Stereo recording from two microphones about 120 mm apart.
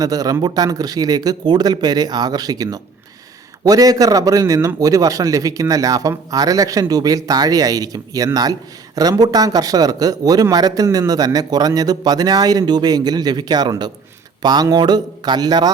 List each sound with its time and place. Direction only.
0.0 s a man's voice: 30° right (ahead or behind)